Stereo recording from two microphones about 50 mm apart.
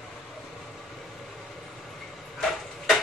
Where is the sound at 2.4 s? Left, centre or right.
Centre.